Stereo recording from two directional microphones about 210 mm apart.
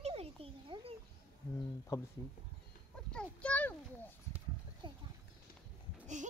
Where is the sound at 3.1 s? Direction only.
5° left (ahead or behind).